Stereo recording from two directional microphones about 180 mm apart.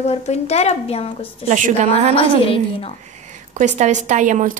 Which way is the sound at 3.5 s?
40° right (ahead or behind).